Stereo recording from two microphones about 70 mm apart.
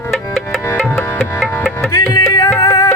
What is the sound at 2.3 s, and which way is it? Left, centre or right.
Music, left.